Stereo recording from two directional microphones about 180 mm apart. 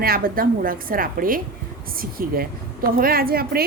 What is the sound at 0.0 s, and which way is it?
A woman's voice, 55° right (ahead or behind).